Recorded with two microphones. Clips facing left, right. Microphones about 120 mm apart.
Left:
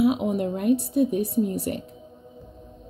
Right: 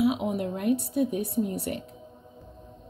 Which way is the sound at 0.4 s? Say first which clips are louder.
Left 4 dB; 25° left (ahead or behind).